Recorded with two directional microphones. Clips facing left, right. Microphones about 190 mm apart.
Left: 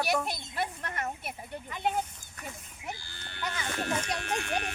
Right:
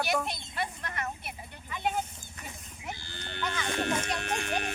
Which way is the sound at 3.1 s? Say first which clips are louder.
Right 5 dB; 20° right (ahead or behind).